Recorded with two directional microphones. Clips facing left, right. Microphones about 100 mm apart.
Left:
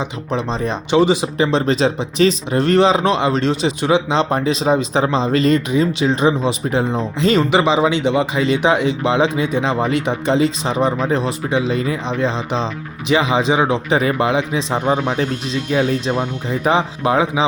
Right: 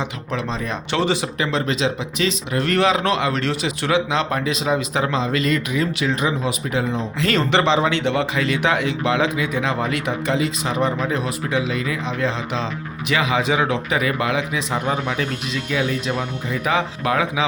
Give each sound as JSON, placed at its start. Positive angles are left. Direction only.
{"t": 0.0, "sound": "speech", "side_deg": 25}
{"t": 0.9, "sound": "speech", "side_deg": 15}
{"t": 7.2, "sound": "speech", "side_deg": 20}